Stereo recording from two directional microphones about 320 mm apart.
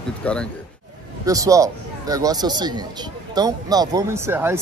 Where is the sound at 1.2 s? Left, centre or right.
Centre.